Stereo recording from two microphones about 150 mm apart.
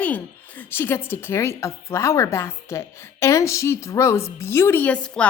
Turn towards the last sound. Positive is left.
turn(degrees=10)  # may be behind; listen again after turning